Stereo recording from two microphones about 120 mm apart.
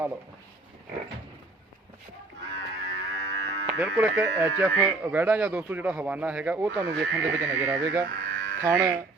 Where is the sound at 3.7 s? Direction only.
10° right (ahead or behind).